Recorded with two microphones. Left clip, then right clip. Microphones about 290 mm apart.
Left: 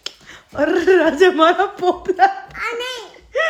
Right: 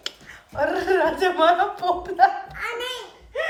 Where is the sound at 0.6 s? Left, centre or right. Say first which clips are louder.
Left 6 dB; left.